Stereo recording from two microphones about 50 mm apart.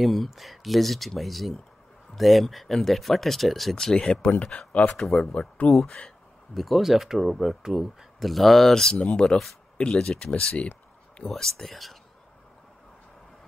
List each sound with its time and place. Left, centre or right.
0.0 s speech: centre
3.7 s speech: centre
4.8 s speech: centre
5.3 s speech: left
5.7 s speech: centre
9.0 s speech: centre
11.2 s speech: centre